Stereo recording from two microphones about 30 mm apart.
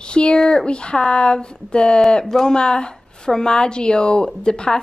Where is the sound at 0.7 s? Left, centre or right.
Left.